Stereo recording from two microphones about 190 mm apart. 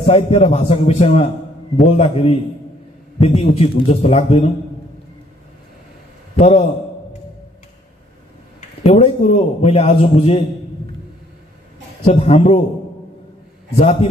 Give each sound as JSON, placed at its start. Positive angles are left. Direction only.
{"t": 0.0, "sound": "a man's voice", "side_deg": 35}
{"t": 6.3, "sound": "a man's voice", "side_deg": 35}
{"t": 8.5, "sound": "a man's voice", "side_deg": 35}
{"t": 12.1, "sound": "a man's voice", "side_deg": 30}